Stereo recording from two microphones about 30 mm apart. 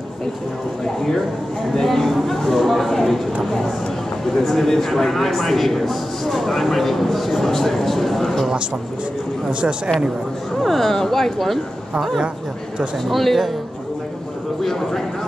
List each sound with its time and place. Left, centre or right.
1.8 s a man's voice: centre
4.4 s a man's voice: centre
9.5 s speech: right
10.6 s a man's voice: centre
13.1 s speech: centre